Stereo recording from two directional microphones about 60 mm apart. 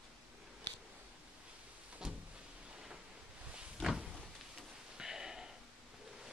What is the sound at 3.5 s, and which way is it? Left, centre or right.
Cupboard open or close, centre.